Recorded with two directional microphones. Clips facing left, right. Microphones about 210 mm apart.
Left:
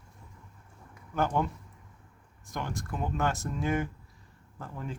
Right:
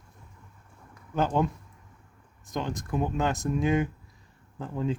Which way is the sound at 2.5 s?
20° right (ahead or behind).